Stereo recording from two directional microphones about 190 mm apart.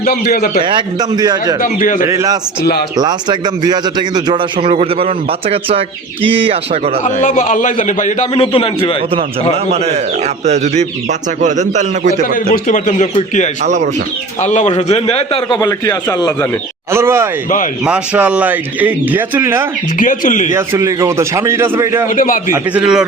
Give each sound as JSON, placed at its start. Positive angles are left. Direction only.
{"t": 0.1, "sound": "a man's voice", "side_deg": 50}
{"t": 0.6, "sound": "speech", "side_deg": -25}
{"t": 1.6, "sound": "a man's voice", "side_deg": 45}
{"t": 2.0, "sound": "speech", "side_deg": -15}
{"t": 7.0, "sound": "a man's voice", "side_deg": 40}
{"t": 8.4, "sound": "a man's voice", "side_deg": 30}
{"t": 10.4, "sound": "a man's voice", "side_deg": -35}
{"t": 12.2, "sound": "a man's voice", "side_deg": 45}
{"t": 14.4, "sound": "a man's voice", "side_deg": 35}
{"t": 16.9, "sound": "speech", "side_deg": -15}
{"t": 20.0, "sound": "a man's voice", "side_deg": 45}
{"t": 20.5, "sound": "speech", "side_deg": -15}
{"t": 22.1, "sound": "a man's voice", "side_deg": 45}
{"t": 22.5, "sound": "speech", "side_deg": -5}